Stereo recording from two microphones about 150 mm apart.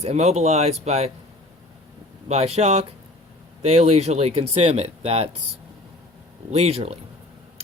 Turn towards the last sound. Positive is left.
turn(degrees=-40)  # may be behind; listen again after turning